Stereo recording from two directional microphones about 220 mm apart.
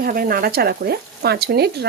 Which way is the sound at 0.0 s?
40° right (ahead or behind).